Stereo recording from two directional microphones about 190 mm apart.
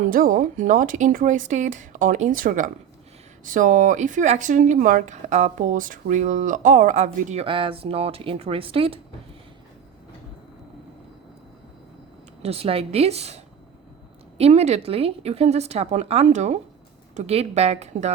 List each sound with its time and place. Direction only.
0.0 s speech: 45° right (ahead or behind)
7.4 s speech: 25° right (ahead or behind)
12.4 s a woman's voice: 30° right (ahead or behind)